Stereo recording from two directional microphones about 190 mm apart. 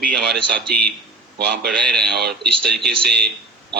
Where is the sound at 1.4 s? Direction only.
60° right (ahead or behind).